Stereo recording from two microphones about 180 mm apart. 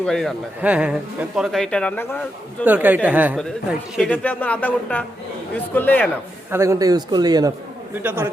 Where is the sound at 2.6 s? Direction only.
10° right (ahead or behind); by 6.1 s 10° left (ahead or behind).